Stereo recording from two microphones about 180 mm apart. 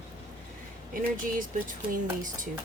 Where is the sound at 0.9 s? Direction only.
50° right (ahead or behind).